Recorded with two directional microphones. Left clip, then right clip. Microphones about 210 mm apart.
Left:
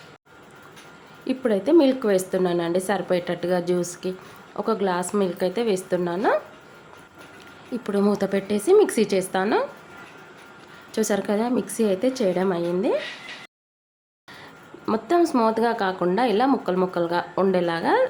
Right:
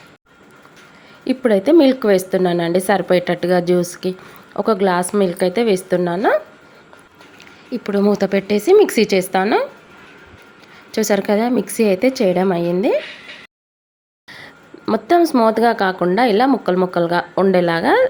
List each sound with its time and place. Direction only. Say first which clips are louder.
1.2 s speech: right 7 dB; 25° right (ahead or behind)
7.7 s speech: right 6 dB; 15° right (ahead or behind)
10.9 s speech: right 7 dB; 20° right (ahead or behind)
14.3 s speech: right 5 dB; 20° right (ahead or behind)